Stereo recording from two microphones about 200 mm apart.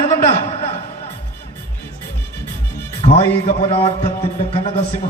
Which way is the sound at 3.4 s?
30° left (ahead or behind).